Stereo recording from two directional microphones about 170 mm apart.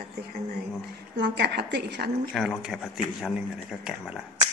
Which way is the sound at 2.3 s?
5° right (ahead or behind).